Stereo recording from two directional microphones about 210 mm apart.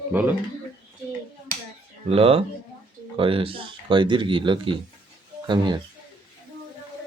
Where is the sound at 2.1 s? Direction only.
25° right (ahead or behind).